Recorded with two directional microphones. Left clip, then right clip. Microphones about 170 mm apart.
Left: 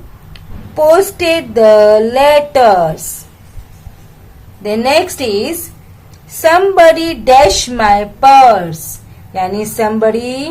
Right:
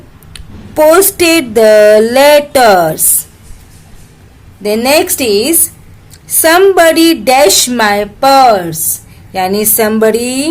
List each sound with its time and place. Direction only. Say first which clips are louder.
0.3 s speech: right 4 dB; 40° right (ahead or behind)
4.6 s speech: right 2 dB; 35° right (ahead or behind)
9.3 s speech: right 4 dB; 40° right (ahead or behind)